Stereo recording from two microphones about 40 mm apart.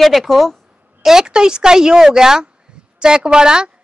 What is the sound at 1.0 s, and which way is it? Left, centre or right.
A woman's voice, centre.